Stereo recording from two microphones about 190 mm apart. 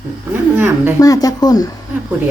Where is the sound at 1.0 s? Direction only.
20° left (ahead or behind).